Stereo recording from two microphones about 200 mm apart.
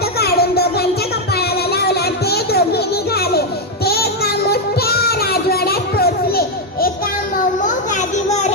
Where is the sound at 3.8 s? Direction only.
50° left (ahead or behind).